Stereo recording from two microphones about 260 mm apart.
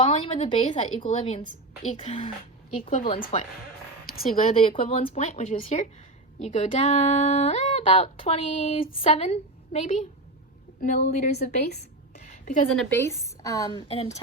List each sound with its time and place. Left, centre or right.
0.0 s speech: centre
4.5 s a woman's voice: left
12.2 s a sound: left
12.7 s a woman's voice: centre; by 14.2 s left